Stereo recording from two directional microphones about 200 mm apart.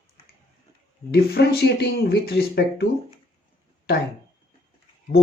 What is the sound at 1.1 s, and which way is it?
Speech, 55° left (ahead or behind).